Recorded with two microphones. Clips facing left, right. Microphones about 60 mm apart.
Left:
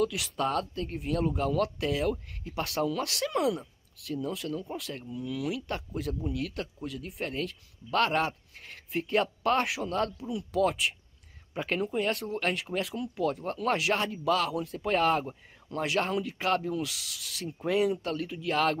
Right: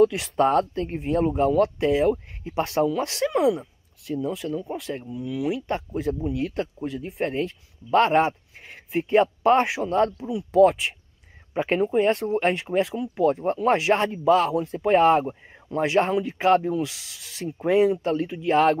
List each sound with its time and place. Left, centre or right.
0.0 s speech: right